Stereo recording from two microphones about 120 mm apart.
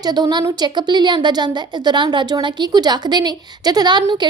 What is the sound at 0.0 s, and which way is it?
A woman's voice, 35° right (ahead or behind).